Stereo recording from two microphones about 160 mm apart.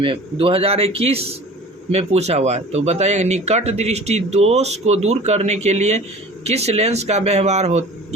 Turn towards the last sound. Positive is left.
turn(degrees=-45)  # may be behind; listen again after turning